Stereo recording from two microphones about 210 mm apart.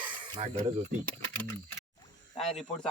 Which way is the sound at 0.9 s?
35° right (ahead or behind).